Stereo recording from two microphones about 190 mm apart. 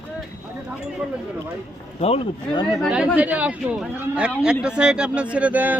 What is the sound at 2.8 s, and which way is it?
A man's voice, 5° right (ahead or behind).